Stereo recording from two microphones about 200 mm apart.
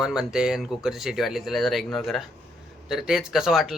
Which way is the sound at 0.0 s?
5° right (ahead or behind).